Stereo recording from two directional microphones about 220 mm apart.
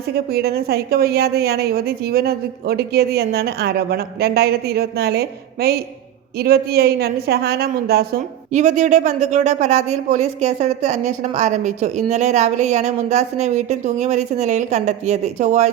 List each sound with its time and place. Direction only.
0.1 s a woman's voice: 45° right (ahead or behind)
8.5 s speech: 30° right (ahead or behind)